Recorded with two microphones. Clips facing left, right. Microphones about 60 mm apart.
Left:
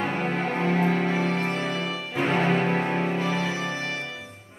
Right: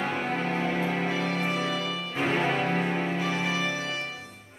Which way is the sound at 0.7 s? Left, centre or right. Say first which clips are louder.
Left 5 dB; left.